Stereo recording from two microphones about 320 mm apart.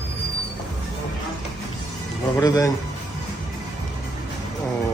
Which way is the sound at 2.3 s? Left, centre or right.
Centre.